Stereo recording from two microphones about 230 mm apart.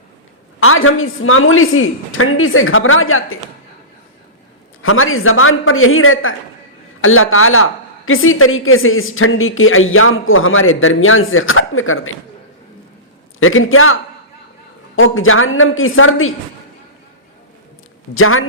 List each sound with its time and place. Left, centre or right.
0.6 s a woman's voice: left
4.8 s a woman's voice: left
13.4 s a woman's voice: left
18.1 s a woman's voice: left